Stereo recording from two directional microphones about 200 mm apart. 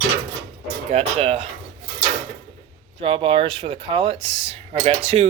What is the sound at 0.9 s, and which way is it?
Speech, 35° right (ahead or behind).